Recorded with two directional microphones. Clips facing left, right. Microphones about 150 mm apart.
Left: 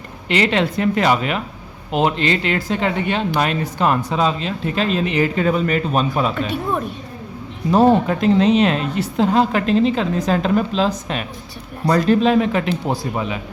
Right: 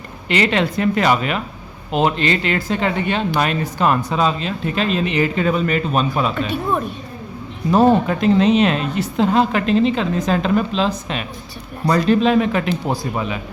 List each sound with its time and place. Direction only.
0.3 s a man's voice: 30° left (ahead or behind)
7.7 s a man's voice: 30° left (ahead or behind)